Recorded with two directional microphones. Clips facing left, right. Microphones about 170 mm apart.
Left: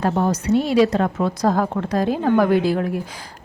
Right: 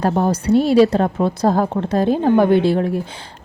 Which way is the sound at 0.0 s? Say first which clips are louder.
Right 2 dB; 35° right (ahead or behind).